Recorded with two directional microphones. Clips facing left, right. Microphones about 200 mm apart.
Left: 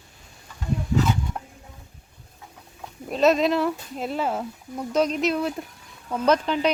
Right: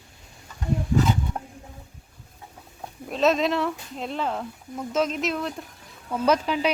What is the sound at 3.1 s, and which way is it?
A man's voice, centre (ahead or behind).